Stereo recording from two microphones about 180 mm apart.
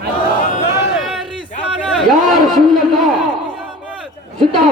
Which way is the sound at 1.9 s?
Centre (ahead or behind).